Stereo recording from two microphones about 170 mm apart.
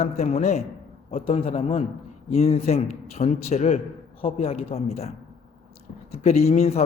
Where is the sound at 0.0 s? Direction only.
40° left (ahead or behind).